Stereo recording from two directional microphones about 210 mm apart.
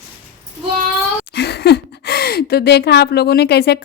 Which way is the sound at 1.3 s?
50° left (ahead or behind).